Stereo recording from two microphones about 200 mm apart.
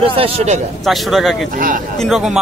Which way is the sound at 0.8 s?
Centre (ahead or behind).